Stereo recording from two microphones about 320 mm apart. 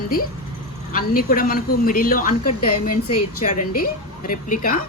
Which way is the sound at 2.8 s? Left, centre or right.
Left.